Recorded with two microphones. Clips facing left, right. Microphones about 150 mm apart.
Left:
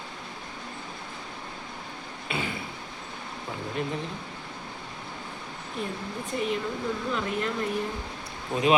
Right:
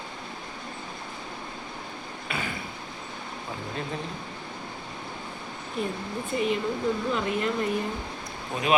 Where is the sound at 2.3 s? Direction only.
25° left (ahead or behind).